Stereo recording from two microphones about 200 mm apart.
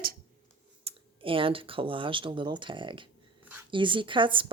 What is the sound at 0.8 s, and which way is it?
A woman's voice, 30° right (ahead or behind).